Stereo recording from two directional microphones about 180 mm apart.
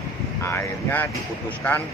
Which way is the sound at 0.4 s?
15° left (ahead or behind).